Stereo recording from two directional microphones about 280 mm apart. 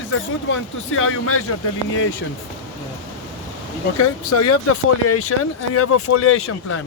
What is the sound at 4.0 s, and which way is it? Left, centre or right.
Speech, left.